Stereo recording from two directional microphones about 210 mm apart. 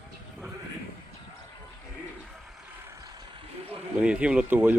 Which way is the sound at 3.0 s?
15° right (ahead or behind).